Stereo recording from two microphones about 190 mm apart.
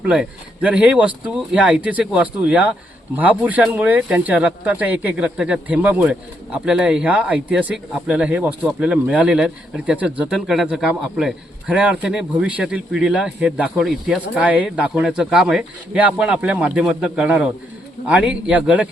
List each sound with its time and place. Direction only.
0.0 s speech: 5° right (ahead or behind)